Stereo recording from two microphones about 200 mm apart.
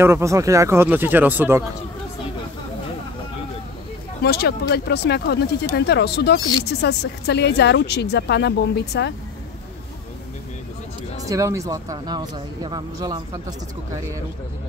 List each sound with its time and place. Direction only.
0.0 s speech: 15° right (ahead or behind)
4.2 s speech: 50° left (ahead or behind)
11.2 s speech: 15° right (ahead or behind)